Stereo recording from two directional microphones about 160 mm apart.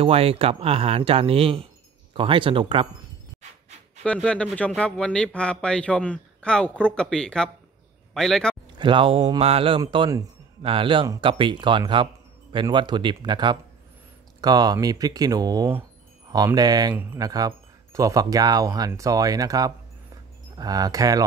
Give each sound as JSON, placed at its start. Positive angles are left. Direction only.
{"t": 0.0, "sound": "speech", "side_deg": -35}
{"t": 4.0, "sound": "a man's voice", "side_deg": 5}
{"t": 8.7, "sound": "speech", "side_deg": -30}
{"t": 16.9, "sound": "speech", "side_deg": -10}
{"t": 17.2, "sound": "speech", "side_deg": -25}